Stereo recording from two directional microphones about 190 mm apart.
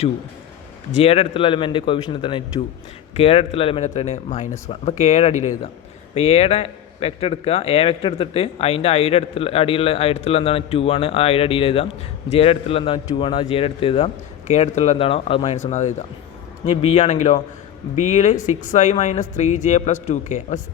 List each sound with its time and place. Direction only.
0.9 s a man's voice: 30° left (ahead or behind)